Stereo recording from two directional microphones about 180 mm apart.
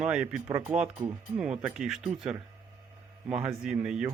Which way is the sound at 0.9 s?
25° right (ahead or behind).